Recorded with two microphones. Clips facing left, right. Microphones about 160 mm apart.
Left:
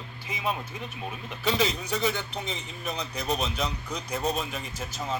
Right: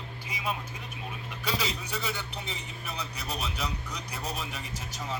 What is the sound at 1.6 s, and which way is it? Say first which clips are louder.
Speech: left 7 dB; 35° left (ahead or behind).